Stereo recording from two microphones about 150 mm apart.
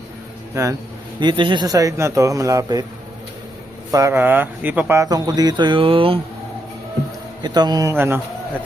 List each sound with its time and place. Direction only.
0.5 s speech: 20° right (ahead or behind)
1.2 s speech: 35° right (ahead or behind)
3.9 s speech: 20° right (ahead or behind)
4.9 s speech: 25° right (ahead or behind)
7.4 s speech: 25° right (ahead or behind)